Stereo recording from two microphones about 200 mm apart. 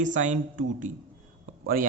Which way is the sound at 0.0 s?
40° right (ahead or behind).